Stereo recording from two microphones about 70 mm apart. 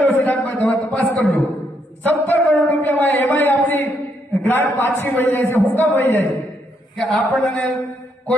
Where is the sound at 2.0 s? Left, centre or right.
Left.